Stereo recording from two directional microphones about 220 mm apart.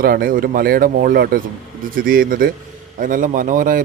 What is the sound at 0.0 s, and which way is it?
Speech, 40° right (ahead or behind).